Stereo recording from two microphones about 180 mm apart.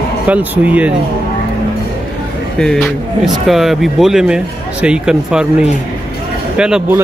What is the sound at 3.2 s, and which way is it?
Speech, centre (ahead or behind).